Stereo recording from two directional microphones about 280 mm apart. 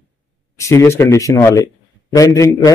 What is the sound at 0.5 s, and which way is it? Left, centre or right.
Speech, centre.